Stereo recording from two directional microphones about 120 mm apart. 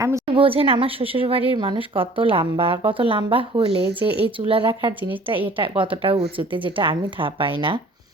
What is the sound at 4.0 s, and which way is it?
Speech, 15° right (ahead or behind).